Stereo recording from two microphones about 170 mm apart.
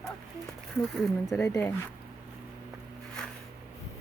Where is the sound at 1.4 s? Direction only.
5° left (ahead or behind).